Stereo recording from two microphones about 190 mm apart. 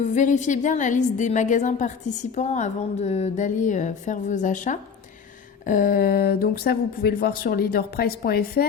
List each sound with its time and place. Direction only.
0.0 s a woman's voice: 40° left (ahead or behind)